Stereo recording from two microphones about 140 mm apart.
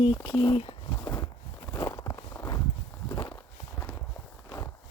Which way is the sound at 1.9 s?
25° left (ahead or behind).